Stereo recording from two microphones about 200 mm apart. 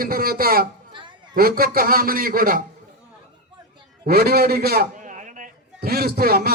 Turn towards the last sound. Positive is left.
turn(degrees=-50)  # may be behind; listen again after turning